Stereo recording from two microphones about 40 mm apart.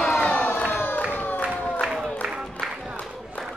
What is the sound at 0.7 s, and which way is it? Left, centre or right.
Crowd, left.